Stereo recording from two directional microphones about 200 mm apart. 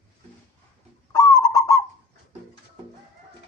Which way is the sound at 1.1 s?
15° left (ahead or behind).